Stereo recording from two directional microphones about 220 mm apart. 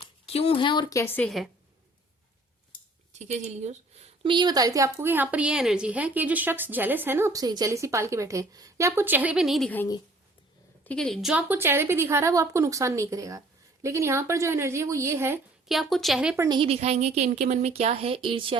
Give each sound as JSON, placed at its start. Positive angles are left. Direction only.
{"t": 0.0, "sound": "speech", "side_deg": 25}
{"t": 3.1, "sound": "a woman's voice", "side_deg": -30}
{"t": 16.3, "sound": "a woman's voice", "side_deg": -15}
{"t": 16.6, "sound": "a woman's voice", "side_deg": -30}